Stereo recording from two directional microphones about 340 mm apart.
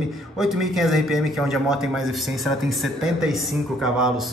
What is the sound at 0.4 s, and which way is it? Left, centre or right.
A man's voice, centre.